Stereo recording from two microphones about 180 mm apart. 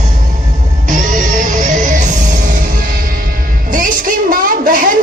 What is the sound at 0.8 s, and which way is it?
Music, 45° right (ahead or behind).